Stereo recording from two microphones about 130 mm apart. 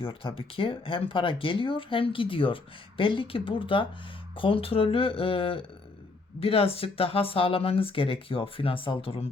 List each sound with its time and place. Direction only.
0.0 s speech: 45° left (ahead or behind)